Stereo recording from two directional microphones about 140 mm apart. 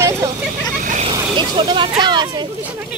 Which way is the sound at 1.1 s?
30° right (ahead or behind).